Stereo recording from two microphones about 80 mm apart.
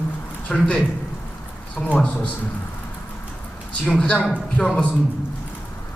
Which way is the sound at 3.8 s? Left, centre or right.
Centre.